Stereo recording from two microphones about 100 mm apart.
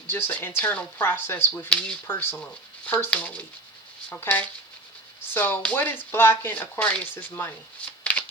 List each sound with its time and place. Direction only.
0.1 s speech: 20° left (ahead or behind)